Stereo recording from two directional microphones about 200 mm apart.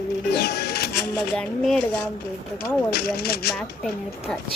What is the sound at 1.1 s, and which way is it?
Speech, centre (ahead or behind).